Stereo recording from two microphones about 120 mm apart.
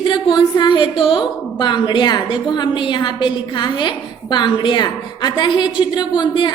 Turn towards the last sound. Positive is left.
turn(degrees=40)  # may be behind; listen again after turning